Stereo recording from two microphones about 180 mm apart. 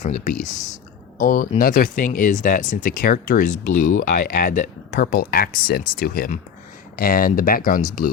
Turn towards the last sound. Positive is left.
turn(degrees=50)  # may be behind; listen again after turning